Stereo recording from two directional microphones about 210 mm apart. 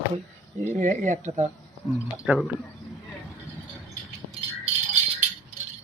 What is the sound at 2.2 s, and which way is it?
Speech, 5° right (ahead or behind).